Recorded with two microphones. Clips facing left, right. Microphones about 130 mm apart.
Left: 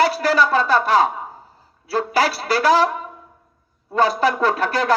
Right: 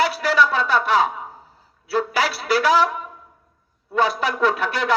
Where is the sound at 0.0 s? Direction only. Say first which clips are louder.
Left 2 dB; 40° left (ahead or behind).